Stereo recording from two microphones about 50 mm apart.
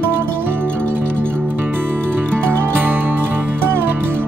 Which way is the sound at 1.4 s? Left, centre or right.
Right.